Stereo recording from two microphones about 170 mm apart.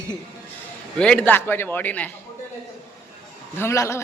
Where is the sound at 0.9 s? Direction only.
5° left (ahead or behind).